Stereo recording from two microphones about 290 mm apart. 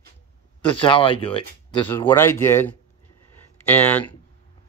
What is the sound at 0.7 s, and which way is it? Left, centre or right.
Speech, centre.